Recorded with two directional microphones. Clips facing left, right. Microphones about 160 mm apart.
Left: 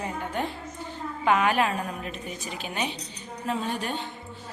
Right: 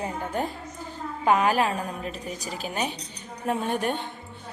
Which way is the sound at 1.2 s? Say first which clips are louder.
Right 1 dB; 35° right (ahead or behind).